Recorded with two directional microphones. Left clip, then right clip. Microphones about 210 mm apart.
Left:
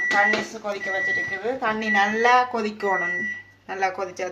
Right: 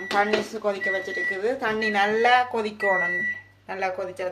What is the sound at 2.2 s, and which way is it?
Speech, 15° right (ahead or behind).